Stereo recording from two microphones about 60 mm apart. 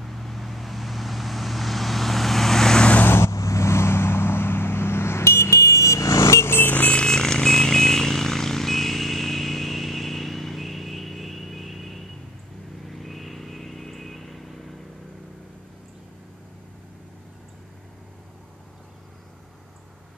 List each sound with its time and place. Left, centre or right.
0.0 s vehicle: centre
3.1 s vehicle: left
3.3 s vehicle: left
6.9 s vehicle: centre